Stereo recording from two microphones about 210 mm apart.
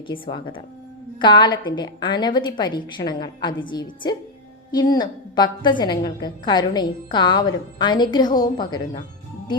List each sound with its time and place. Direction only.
0.1 s a woman's voice: 25° left (ahead or behind)